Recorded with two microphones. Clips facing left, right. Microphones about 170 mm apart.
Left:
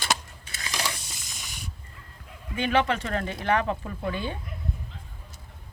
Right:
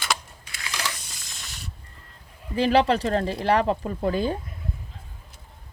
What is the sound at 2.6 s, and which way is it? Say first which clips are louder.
Speech: right 5 dB; 35° right (ahead or behind).